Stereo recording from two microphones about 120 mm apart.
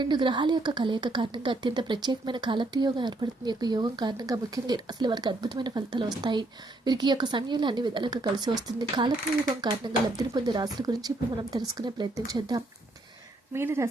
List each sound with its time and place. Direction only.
0.0 s speech: 40° right (ahead or behind)
13.5 s speech: 20° right (ahead or behind)